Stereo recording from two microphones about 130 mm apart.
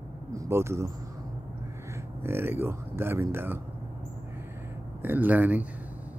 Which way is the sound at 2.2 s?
15° right (ahead or behind).